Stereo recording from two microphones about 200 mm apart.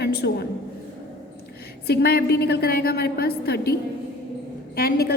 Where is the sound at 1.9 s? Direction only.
55° left (ahead or behind).